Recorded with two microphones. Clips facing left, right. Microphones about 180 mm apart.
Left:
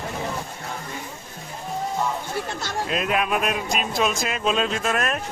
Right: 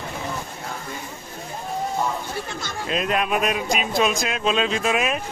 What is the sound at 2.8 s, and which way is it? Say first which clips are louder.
Speech: right 1 dB; centre (ahead or behind).